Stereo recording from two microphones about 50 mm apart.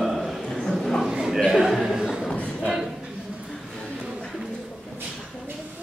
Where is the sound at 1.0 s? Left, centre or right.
Centre.